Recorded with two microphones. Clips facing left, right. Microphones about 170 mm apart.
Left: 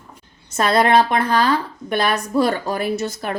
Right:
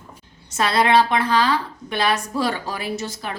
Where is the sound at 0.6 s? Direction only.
50° left (ahead or behind).